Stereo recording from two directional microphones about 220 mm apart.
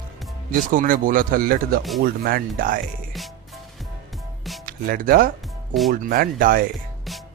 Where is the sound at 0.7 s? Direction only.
40° right (ahead or behind).